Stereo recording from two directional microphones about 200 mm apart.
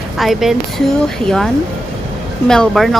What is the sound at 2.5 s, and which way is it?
Speech, centre (ahead or behind).